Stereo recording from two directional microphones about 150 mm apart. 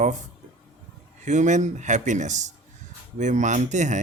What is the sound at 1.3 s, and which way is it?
Speech, 55° right (ahead or behind).